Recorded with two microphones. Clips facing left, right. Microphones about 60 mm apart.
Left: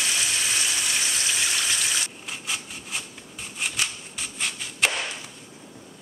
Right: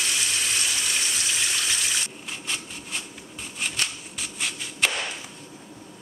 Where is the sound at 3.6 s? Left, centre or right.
Centre.